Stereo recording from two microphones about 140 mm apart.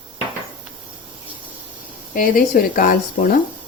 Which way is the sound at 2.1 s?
75° left (ahead or behind).